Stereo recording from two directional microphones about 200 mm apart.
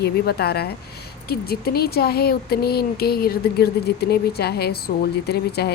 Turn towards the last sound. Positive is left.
turn(degrees=55)  # may be behind; listen again after turning